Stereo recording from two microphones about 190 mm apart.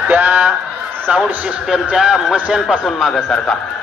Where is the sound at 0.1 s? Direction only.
10° right (ahead or behind).